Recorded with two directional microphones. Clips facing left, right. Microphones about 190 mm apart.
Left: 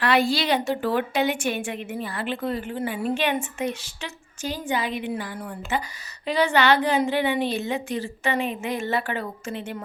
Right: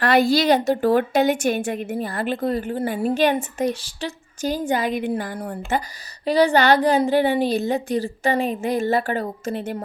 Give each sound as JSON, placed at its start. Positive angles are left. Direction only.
{"t": 0.0, "sound": "a woman's voice", "side_deg": -40}